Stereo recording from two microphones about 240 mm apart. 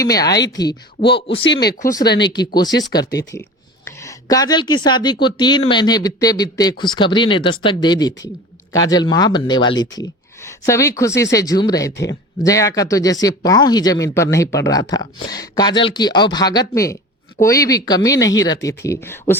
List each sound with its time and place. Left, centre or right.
0.0 s speech: centre
2.0 s speech: left
2.6 s speech: centre